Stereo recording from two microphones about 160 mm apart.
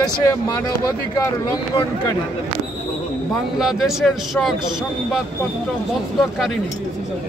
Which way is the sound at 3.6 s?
Centre (ahead or behind).